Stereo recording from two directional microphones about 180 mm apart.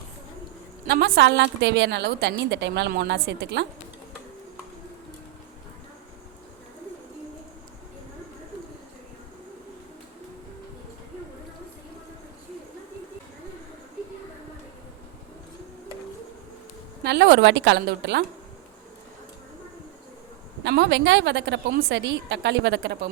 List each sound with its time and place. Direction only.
0.9 s a woman's voice: 65° right (ahead or behind)
17.0 s a woman's voice: 65° right (ahead or behind)
20.7 s a woman's voice: 75° right (ahead or behind)